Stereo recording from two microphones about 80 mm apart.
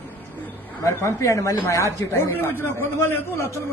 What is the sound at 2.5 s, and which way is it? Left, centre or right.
Speech, left.